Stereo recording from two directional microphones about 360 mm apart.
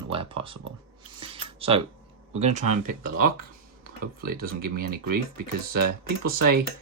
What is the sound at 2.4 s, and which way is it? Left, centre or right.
Speech, centre.